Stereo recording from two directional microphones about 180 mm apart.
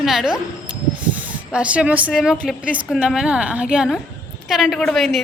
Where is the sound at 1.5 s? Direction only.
5° right (ahead or behind).